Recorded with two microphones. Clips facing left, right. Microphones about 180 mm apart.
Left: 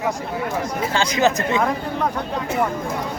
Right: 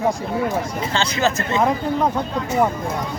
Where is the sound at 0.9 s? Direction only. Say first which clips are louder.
Left 2 dB; 15° left (ahead or behind).